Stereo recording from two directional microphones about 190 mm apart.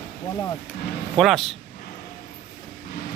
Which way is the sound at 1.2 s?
Centre (ahead or behind).